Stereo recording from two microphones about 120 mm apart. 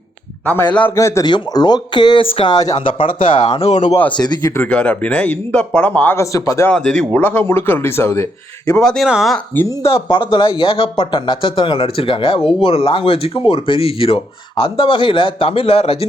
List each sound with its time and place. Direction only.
0.4 s speech: 15° left (ahead or behind)
0.9 s speech: 25° left (ahead or behind)
1.2 s speech: 35° left (ahead or behind)
4.5 s speech: 10° left (ahead or behind)
6.7 s speech: 5° left (ahead or behind); by 8.8 s 25° left (ahead or behind)
8.8 s speech: 5° left (ahead or behind)
9.9 s speech: 45° left (ahead or behind)